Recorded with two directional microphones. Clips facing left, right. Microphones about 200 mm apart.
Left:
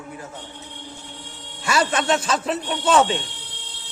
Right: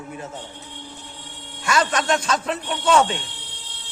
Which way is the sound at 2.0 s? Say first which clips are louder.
Left 1 dB; 5° left (ahead or behind).